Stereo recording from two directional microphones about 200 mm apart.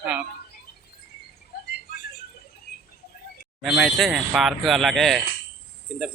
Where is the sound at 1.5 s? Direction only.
55° left (ahead or behind).